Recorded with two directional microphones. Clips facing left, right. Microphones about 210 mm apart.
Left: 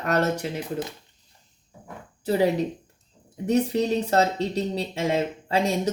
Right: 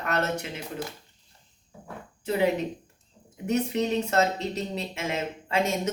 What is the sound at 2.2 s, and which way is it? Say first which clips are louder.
Speech: left 3 dB; 35° left (ahead or behind).